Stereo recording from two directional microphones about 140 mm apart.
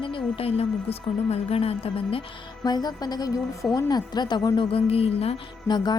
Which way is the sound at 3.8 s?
30° left (ahead or behind).